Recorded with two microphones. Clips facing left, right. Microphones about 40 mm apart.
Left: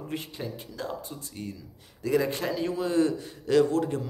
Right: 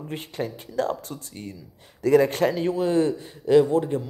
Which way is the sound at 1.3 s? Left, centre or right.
Right.